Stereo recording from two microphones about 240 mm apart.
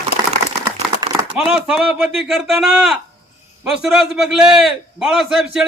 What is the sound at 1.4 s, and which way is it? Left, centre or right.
A man's voice, centre.